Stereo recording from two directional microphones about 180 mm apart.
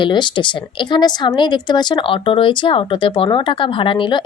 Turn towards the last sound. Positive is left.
turn(degrees=25)  # may be behind; listen again after turning